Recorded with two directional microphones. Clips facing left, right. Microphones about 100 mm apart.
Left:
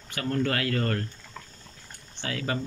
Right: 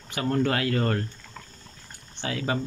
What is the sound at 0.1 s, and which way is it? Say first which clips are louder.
Speech: right 3 dB; 20° right (ahead or behind).